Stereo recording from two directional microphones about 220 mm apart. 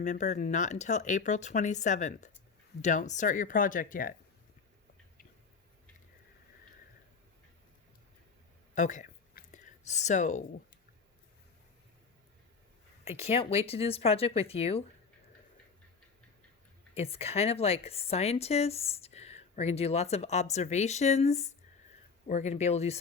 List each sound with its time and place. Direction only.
0.0 s speech: 35° left (ahead or behind)
8.7 s a sound: 35° left (ahead or behind)
13.1 s a woman's voice: 25° left (ahead or behind)
16.9 s a woman's voice: 25° left (ahead or behind)